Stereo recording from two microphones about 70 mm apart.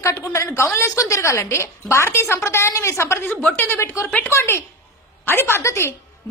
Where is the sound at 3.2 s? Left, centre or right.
Left.